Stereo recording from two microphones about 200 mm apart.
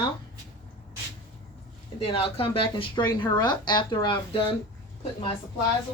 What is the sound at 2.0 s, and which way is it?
Speech, 30° left (ahead or behind).